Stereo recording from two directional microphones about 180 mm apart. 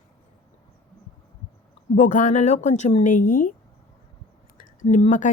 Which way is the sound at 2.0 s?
45° left (ahead or behind).